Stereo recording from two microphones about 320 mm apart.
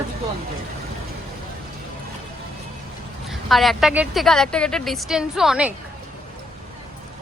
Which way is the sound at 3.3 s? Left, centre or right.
Centre.